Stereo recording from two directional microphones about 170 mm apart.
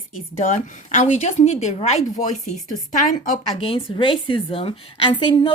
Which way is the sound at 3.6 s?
30° left (ahead or behind).